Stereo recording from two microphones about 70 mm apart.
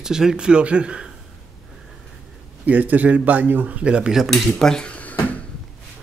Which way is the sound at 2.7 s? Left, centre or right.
Right.